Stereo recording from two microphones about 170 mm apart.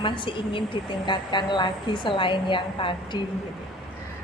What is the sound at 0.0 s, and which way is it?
A woman's voice, 30° left (ahead or behind).